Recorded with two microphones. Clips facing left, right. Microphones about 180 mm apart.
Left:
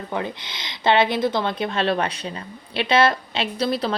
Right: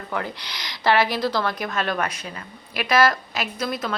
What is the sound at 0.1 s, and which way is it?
A woman's voice, 20° left (ahead or behind).